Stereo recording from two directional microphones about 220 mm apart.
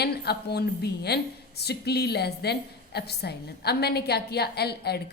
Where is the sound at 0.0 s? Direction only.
45° left (ahead or behind).